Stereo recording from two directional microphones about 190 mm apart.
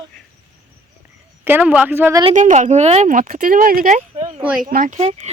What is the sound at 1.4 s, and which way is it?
Speech, 10° right (ahead or behind).